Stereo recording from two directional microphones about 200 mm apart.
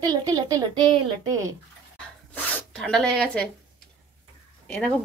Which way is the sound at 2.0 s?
5° left (ahead or behind).